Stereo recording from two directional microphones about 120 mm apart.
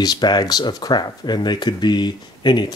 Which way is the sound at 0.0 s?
35° left (ahead or behind).